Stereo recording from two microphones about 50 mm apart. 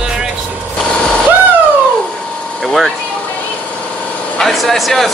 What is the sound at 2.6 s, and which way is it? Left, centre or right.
Speech, centre.